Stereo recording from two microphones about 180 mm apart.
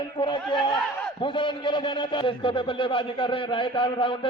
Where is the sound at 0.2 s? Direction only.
25° left (ahead or behind).